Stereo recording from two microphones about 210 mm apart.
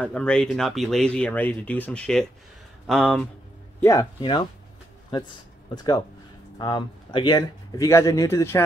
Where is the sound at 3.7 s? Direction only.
15° left (ahead or behind).